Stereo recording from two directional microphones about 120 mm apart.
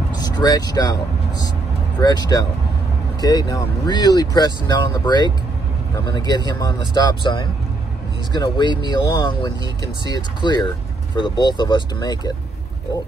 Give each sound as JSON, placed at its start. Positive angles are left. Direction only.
{"t": 0.1, "sound": "speech", "side_deg": 35}
{"t": 2.0, "sound": "speech", "side_deg": 35}